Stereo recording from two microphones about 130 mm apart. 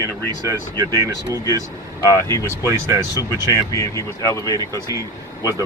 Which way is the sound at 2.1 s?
25° left (ahead or behind).